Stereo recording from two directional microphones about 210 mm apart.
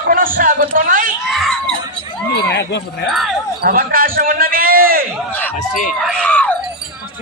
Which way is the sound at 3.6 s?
45° right (ahead or behind).